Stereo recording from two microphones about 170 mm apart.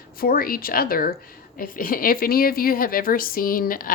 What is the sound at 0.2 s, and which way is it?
A woman's voice, 60° left (ahead or behind).